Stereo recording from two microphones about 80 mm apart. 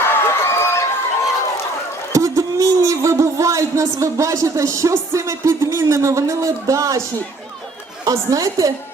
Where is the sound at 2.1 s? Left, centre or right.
Right.